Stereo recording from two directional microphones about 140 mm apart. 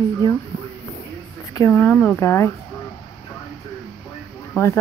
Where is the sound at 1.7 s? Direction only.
15° left (ahead or behind).